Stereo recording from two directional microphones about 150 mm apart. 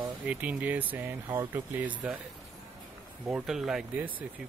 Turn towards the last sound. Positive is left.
turn(degrees=-10)  # may be behind; listen again after turning